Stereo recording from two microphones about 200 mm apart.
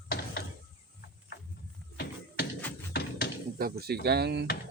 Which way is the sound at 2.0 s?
55° left (ahead or behind).